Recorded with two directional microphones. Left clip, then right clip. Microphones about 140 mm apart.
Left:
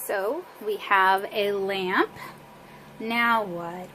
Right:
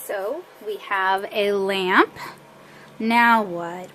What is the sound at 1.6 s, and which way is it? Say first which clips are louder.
Speech: right 6 dB; 35° right (ahead or behind).